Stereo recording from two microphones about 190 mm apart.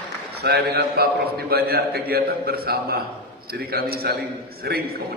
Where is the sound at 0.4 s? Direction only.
60° right (ahead or behind).